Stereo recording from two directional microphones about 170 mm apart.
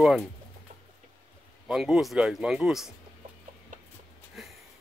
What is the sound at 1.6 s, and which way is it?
Speech, 5° right (ahead or behind).